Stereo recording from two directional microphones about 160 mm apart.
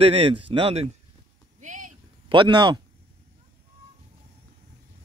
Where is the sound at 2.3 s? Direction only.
30° right (ahead or behind).